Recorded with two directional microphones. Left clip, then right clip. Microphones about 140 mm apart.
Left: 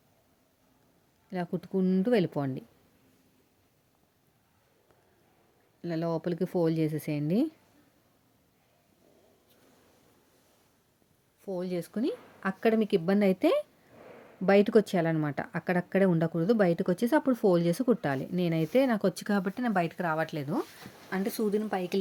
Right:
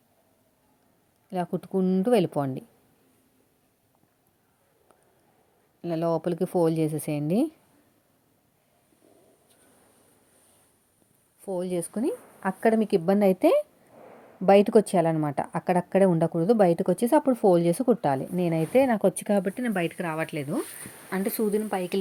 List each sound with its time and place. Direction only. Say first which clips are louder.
1.3 s a woman's voice: right 5 dB; 5° left (ahead or behind)
5.8 s a woman's voice: right 5 dB; 5° left (ahead or behind)
11.4 s speech: right 5 dB; 15° right (ahead or behind)
12.4 s a woman's voice: right 3 dB; centre (ahead or behind); by 19.8 s 15° left (ahead or behind)
20.0 s a woman's voice: even; centre (ahead or behind)
21.1 s speech: right 3 dB; 15° right (ahead or behind)